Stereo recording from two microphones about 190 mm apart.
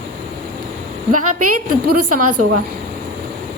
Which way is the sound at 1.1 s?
40° right (ahead or behind).